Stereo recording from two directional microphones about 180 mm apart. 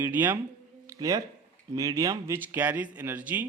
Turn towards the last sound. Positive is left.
turn(degrees=-10)  # may be behind; listen again after turning